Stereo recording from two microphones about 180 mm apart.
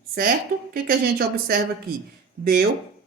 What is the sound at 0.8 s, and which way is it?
Speech, 55° right (ahead or behind).